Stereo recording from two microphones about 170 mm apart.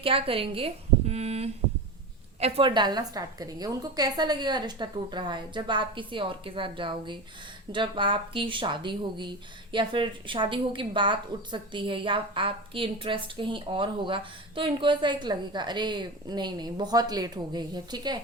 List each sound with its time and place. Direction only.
0.0 s a woman's voice: 35° right (ahead or behind)